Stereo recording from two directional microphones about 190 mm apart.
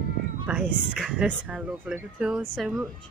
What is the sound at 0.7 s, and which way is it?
Speech, centre (ahead or behind).